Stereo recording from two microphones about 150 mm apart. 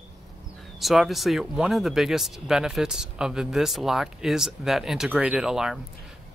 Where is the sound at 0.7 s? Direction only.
Centre (ahead or behind).